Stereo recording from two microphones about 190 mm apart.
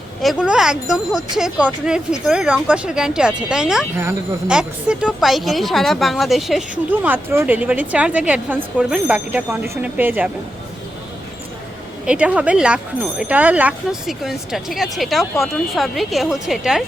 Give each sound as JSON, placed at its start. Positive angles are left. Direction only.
{"t": 0.2, "sound": "speech", "side_deg": -5}
{"t": 12.0, "sound": "speech", "side_deg": -5}